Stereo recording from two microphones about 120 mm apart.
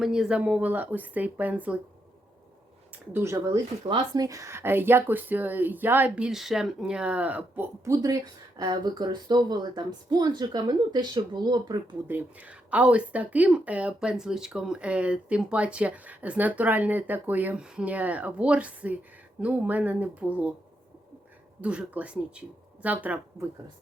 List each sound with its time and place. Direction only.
0.0 s speech: 5° right (ahead or behind)
2.9 s speech: 15° right (ahead or behind)
3.8 s speech: 35° right (ahead or behind); by 7.7 s 15° right (ahead or behind)
7.9 s speech: 30° right (ahead or behind)
12.0 s speech: 15° right (ahead or behind)
21.6 s speech: 10° right (ahead or behind)